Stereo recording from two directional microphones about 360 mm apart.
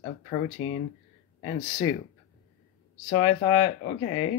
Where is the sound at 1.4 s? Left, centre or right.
Centre.